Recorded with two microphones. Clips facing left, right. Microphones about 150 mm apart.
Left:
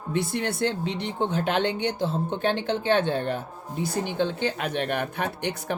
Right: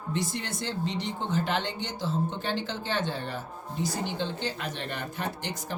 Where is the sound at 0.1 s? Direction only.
60° left (ahead or behind).